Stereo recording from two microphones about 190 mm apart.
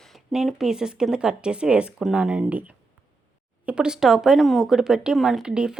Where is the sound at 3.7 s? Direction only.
5° right (ahead or behind).